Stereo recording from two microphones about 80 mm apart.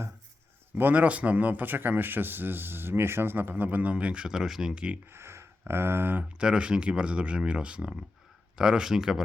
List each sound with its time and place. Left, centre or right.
0.8 s speech: right
5.1 s a sound: right
6.4 s speech: centre